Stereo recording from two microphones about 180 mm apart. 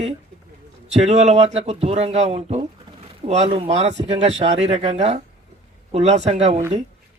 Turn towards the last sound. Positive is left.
turn(degrees=-35)  # may be behind; listen again after turning